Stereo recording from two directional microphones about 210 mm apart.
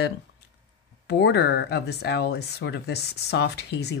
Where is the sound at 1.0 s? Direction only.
55° left (ahead or behind).